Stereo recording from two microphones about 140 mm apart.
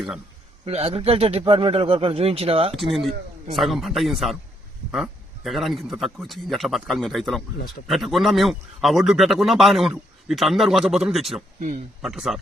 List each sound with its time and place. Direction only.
0.6 s speech: 45° right (ahead or behind)
2.7 s a man's voice: centre (ahead or behind)